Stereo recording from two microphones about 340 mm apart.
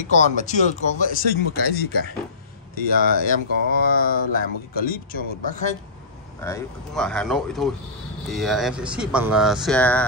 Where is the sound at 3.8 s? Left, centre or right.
Left.